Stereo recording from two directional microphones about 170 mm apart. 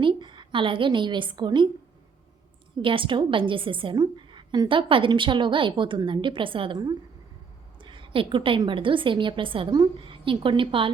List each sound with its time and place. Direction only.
0.0 s a woman's voice: 30° right (ahead or behind)
2.8 s a woman's voice: 30° right (ahead or behind)